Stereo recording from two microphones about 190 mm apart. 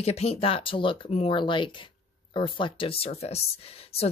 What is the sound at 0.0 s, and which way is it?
Speech, 35° left (ahead or behind).